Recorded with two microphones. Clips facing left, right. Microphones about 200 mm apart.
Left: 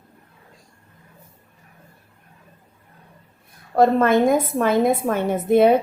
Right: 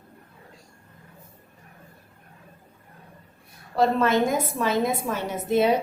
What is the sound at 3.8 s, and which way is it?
A woman's voice, 50° left (ahead or behind).